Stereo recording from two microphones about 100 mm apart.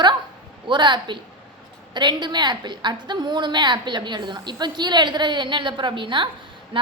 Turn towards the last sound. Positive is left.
turn(degrees=-55)  # may be behind; listen again after turning